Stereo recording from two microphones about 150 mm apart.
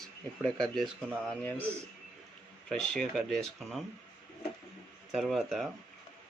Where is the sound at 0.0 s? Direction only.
5° left (ahead or behind).